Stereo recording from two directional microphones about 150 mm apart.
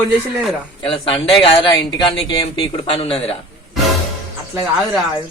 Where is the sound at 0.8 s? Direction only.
35° left (ahead or behind).